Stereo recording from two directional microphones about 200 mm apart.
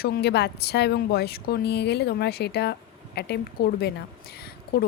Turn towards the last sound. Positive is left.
turn(degrees=50)  # may be behind; listen again after turning